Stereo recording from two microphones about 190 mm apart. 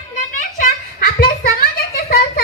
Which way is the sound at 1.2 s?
45° left (ahead or behind).